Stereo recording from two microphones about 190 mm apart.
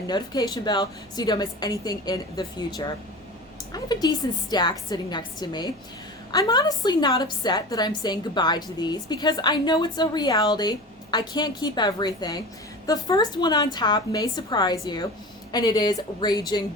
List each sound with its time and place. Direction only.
0.1 s a woman's voice: 20° left (ahead or behind)